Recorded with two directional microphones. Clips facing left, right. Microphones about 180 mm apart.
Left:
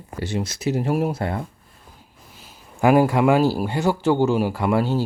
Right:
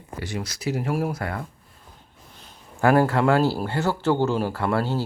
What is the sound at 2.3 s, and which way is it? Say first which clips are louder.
Speech: even; 5° left (ahead or behind).